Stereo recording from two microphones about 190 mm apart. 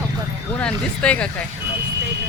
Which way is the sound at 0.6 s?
5° left (ahead or behind).